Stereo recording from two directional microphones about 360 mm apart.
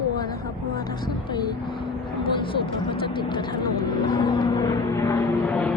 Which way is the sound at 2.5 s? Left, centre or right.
Centre.